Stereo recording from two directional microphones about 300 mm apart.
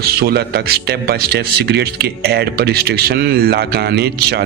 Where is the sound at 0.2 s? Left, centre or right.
Right.